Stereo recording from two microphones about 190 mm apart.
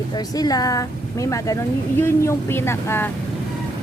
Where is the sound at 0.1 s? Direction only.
20° left (ahead or behind).